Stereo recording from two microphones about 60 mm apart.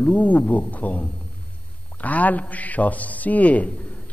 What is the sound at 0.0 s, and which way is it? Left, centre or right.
Speech, left.